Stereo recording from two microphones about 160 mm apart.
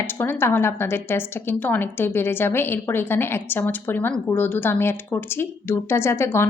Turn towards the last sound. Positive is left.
turn(degrees=15)  # may be behind; listen again after turning